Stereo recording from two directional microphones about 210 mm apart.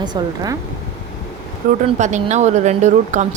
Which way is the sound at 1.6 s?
40° right (ahead or behind).